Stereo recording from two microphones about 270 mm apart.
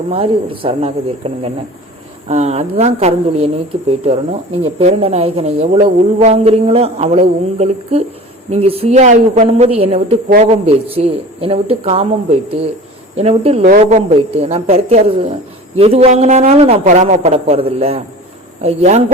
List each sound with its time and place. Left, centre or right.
0.1 s speech: centre